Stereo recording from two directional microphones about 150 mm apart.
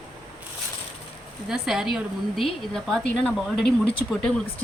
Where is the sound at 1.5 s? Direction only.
5° right (ahead or behind).